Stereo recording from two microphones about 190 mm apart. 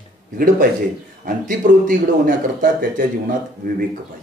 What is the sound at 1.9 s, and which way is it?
Speech, 45° right (ahead or behind).